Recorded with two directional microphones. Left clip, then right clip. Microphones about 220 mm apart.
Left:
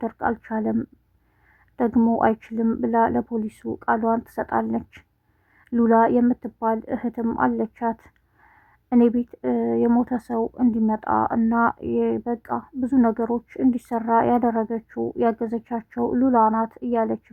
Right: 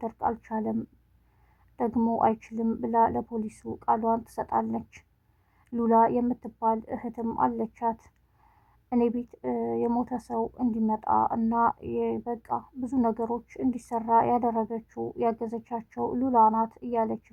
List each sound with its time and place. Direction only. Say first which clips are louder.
0.0 s speech: left 4 dB; 35° left (ahead or behind)